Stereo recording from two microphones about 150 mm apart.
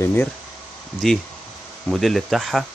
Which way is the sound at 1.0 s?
Centre (ahead or behind).